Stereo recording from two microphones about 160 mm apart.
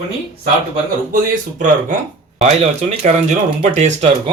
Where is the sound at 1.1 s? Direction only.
55° right (ahead or behind).